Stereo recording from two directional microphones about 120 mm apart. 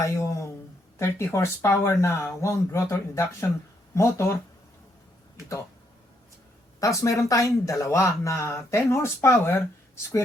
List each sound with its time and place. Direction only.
0.0 s speech: 25° left (ahead or behind)
6.7 s speech: 25° left (ahead or behind)